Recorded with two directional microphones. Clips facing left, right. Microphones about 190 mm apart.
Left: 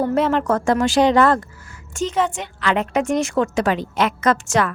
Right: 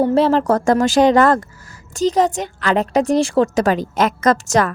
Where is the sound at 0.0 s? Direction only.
30° right (ahead or behind).